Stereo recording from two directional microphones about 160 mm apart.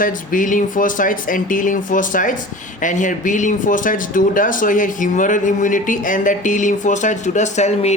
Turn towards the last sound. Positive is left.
turn(degrees=45)  # may be behind; listen again after turning